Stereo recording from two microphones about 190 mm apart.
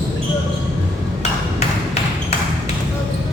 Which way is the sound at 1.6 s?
35° left (ahead or behind).